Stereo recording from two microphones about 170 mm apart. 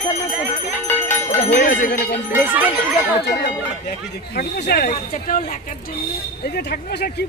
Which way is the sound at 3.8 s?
65° left (ahead or behind).